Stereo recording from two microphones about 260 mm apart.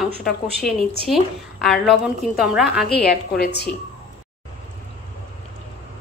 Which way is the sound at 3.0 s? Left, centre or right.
Left.